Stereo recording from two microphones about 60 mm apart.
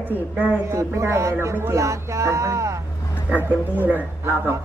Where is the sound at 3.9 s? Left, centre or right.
Right.